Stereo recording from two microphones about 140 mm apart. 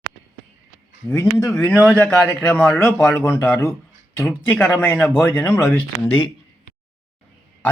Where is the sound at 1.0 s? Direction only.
20° left (ahead or behind).